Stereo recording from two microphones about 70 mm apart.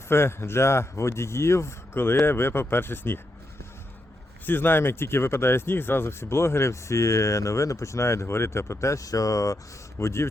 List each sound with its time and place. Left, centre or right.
0.1 s speech: left
4.4 s speech: left
10.0 s speech: left